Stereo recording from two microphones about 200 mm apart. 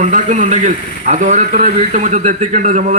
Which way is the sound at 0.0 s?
35° right (ahead or behind).